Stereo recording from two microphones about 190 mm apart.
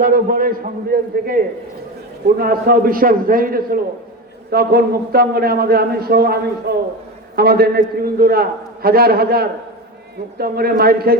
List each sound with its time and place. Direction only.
0.0 s a man's voice: 50° right (ahead or behind)